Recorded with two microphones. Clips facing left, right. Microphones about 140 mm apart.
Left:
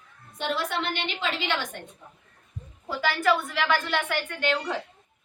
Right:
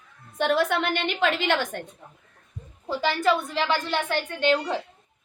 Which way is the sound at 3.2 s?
25° right (ahead or behind).